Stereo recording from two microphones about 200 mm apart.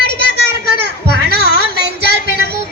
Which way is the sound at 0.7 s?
55° right (ahead or behind).